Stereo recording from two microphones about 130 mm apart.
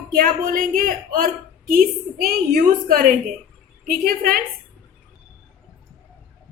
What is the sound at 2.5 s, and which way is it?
Speech, 90° right.